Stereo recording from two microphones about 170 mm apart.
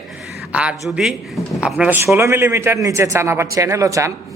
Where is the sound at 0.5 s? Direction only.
5° right (ahead or behind).